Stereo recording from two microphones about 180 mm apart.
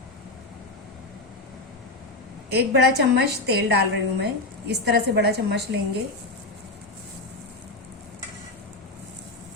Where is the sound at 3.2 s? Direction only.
60° right (ahead or behind).